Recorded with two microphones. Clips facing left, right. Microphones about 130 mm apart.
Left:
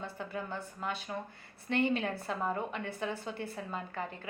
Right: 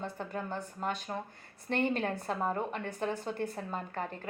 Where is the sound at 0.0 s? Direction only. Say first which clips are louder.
Right 2 dB; 45° right (ahead or behind).